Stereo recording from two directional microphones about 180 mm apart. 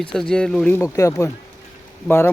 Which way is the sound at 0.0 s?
5° left (ahead or behind).